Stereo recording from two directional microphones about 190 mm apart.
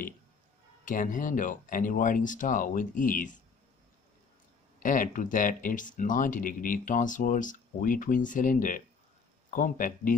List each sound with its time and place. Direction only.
0.8 s speech: 45° left (ahead or behind)
4.8 s speech: 45° left (ahead or behind)